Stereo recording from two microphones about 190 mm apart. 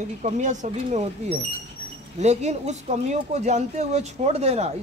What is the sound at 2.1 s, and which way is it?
Speech, 35° right (ahead or behind).